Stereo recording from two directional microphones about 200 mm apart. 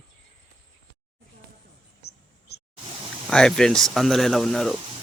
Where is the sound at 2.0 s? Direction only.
55° left (ahead or behind).